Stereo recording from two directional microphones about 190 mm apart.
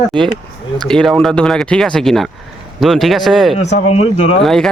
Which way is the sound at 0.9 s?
5° left (ahead or behind).